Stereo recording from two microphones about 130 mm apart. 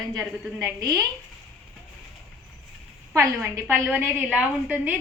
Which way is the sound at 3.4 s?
15° right (ahead or behind).